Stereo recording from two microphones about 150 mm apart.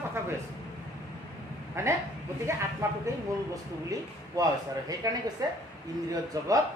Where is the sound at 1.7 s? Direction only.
20° right (ahead or behind).